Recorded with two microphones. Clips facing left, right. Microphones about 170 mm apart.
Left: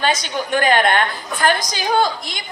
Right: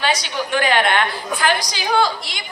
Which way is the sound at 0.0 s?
50° left (ahead or behind).